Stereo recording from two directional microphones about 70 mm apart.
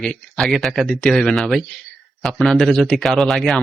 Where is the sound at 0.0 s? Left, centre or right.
Centre.